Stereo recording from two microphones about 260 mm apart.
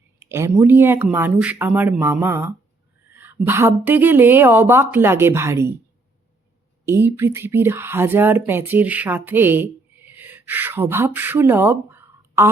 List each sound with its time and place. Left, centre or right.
0.3 s a woman's voice: centre
6.8 s a woman's voice: centre